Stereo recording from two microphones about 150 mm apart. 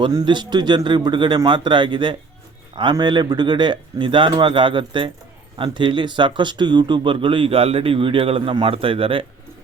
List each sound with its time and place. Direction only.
0.0 s speech: 30° right (ahead or behind)